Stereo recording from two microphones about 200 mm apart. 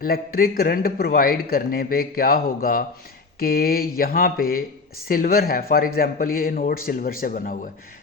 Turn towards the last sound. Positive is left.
turn(degrees=45)  # may be behind; listen again after turning